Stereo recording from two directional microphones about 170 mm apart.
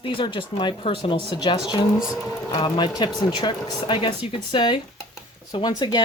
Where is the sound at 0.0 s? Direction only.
30° left (ahead or behind).